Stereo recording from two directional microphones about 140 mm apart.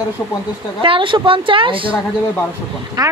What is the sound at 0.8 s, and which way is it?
Speech, 35° right (ahead or behind).